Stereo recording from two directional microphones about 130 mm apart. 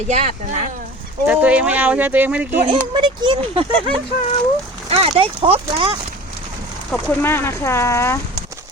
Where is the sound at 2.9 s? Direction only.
40° right (ahead or behind).